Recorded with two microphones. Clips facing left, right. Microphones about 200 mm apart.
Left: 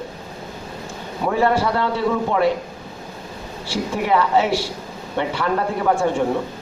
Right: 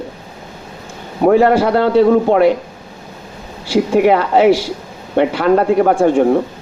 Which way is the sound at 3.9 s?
90° right.